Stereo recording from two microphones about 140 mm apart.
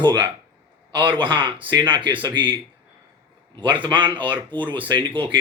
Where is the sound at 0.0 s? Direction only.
30° right (ahead or behind).